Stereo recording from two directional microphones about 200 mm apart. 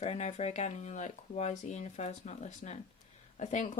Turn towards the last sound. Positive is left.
turn(degrees=35)  # may be behind; listen again after turning